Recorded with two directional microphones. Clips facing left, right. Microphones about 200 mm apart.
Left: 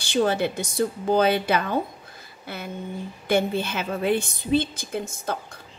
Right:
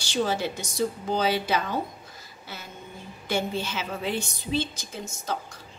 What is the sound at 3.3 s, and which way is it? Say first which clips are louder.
A woman's voice: left 5 dB; 55° left (ahead or behind).